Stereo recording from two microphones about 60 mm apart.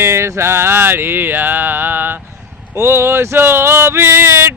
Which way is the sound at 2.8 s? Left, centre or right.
Right.